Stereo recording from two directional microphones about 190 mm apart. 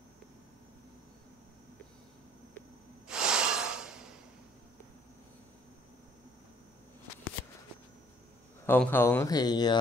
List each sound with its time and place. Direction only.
3.1 s snort: 5° right (ahead or behind)
8.6 s speech: 10° left (ahead or behind)